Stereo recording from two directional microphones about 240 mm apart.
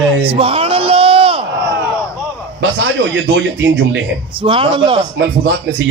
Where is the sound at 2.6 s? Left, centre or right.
Right.